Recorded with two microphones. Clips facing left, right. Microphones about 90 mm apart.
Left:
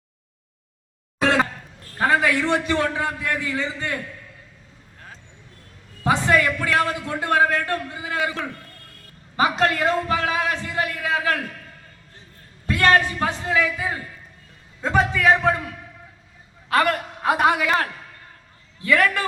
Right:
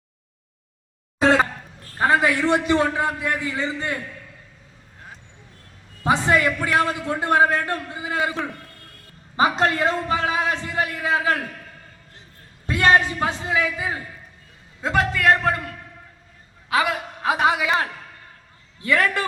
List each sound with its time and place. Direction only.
2.0 s a man's voice: 20° right (ahead or behind)
6.0 s a man's voice: 20° right (ahead or behind)
12.6 s a man's voice: 20° right (ahead or behind)
14.8 s a man's voice: centre (ahead or behind)
18.8 s a man's voice: 30° right (ahead or behind)